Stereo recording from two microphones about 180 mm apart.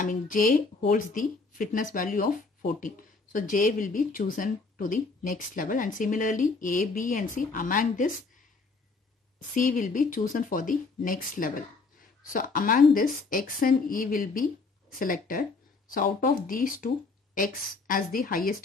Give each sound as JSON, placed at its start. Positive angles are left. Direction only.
{"t": 0.0, "sound": "speech", "side_deg": 45}
{"t": 9.5, "sound": "speech", "side_deg": 45}